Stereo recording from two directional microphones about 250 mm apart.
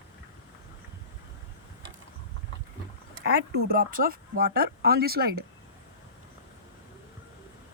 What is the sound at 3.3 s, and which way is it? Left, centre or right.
Speech, right.